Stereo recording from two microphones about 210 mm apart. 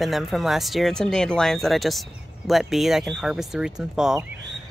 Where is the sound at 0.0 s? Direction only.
Centre (ahead or behind).